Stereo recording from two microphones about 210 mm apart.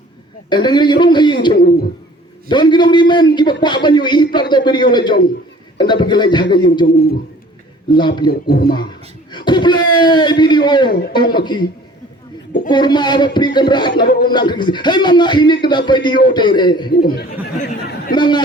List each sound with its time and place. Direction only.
0.5 s a man's voice: 20° left (ahead or behind)
6.8 s speech: 45° left (ahead or behind)
7.9 s a man's voice: 20° left (ahead or behind)
8.3 s speech: 45° left (ahead or behind)
8.7 s a man's voice: 20° left (ahead or behind)
12.6 s a man's voice: 20° left (ahead or behind)
14.0 s speech: 45° left (ahead or behind)
14.3 s a man's voice: 20° left (ahead or behind)
16.9 s speech: 50° left (ahead or behind)
17.6 s chatter: 40° left (ahead or behind)
18.2 s a man's voice: 20° left (ahead or behind)